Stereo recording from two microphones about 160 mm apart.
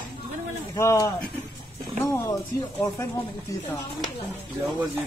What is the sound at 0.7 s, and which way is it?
Speech, 20° left (ahead or behind).